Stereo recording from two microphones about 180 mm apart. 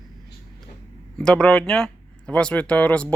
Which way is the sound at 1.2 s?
5° left (ahead or behind).